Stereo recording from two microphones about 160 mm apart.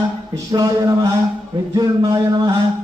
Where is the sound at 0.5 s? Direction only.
25° right (ahead or behind).